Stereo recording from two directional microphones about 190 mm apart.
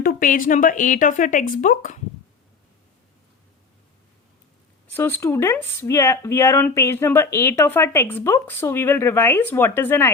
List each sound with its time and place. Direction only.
0.0 s speech: 50° left (ahead or behind)
4.9 s speech: 10° left (ahead or behind)